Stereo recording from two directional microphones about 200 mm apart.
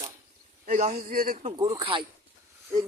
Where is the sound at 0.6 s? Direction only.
40° right (ahead or behind).